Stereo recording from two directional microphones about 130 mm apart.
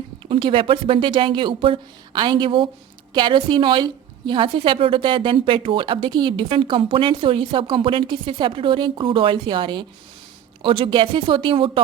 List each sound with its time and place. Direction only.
0.3 s a woman's voice: 40° right (ahead or behind)